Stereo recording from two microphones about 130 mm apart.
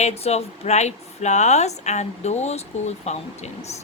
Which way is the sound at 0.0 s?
55° left (ahead or behind).